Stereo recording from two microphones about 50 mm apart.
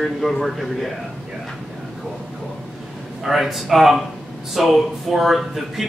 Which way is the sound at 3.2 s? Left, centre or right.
Centre.